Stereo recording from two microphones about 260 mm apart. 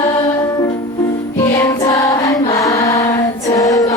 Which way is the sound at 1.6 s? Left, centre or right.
Centre.